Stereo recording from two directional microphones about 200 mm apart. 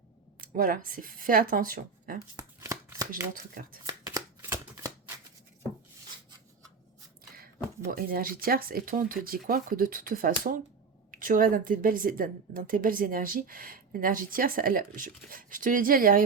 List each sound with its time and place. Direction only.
0.4 s a woman's voice: 45° right (ahead or behind)
2.3 s shuffling cards: 15° right (ahead or behind)
3.3 s a woman's voice: 45° right (ahead or behind)
3.8 s shuffling cards: 15° right (ahead or behind)
7.9 s a woman's voice: 45° right (ahead or behind)